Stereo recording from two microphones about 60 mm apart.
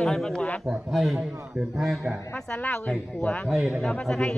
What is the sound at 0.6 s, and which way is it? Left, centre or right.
Speech, centre.